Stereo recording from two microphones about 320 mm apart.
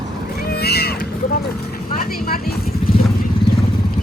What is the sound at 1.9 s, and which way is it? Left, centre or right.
Vehicle, left.